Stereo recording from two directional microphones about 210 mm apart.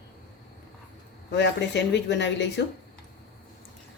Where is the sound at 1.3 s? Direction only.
55° left (ahead or behind).